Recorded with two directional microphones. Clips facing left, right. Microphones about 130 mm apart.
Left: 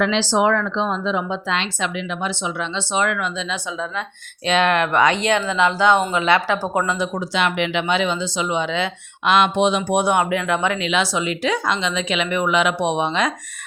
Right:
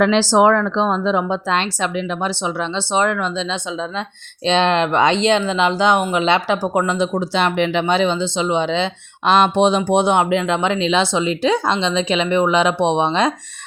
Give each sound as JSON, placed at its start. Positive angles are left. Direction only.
{"t": 0.0, "sound": "speech", "side_deg": -45}